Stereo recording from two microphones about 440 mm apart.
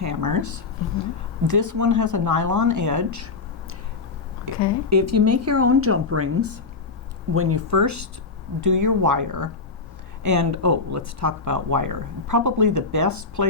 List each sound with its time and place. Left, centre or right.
0.0 s speech: right
4.5 s speech: left
4.9 s speech: right